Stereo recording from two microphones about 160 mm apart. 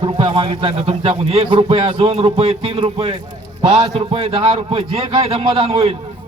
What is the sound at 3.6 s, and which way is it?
Speech, 25° right (ahead or behind).